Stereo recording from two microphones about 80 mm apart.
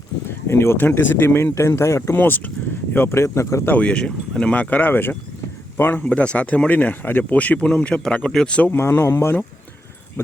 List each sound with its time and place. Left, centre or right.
0.3 s speech: left
2.1 s speech: left
3.7 s speech: centre
6.0 s speech: centre
8.7 s speech: left